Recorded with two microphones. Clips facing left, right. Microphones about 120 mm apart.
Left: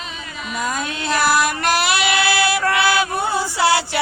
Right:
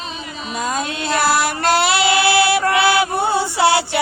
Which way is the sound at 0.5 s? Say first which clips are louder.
Right 2 dB; 25° right (ahead or behind).